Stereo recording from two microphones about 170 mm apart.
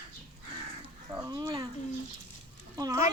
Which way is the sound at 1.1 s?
20° right (ahead or behind).